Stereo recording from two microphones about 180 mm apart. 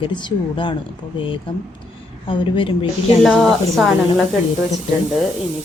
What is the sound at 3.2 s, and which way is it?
Speech, centre (ahead or behind).